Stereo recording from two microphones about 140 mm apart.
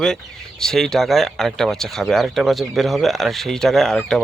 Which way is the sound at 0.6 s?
5° left (ahead or behind).